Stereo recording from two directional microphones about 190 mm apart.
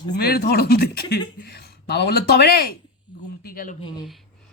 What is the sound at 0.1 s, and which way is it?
Speech, 55° left (ahead or behind).